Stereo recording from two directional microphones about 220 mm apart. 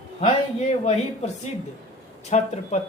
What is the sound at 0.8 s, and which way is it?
Speech, 30° left (ahead or behind).